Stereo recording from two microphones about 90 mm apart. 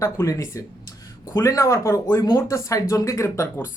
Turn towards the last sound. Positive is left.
turn(degrees=35)  # may be behind; listen again after turning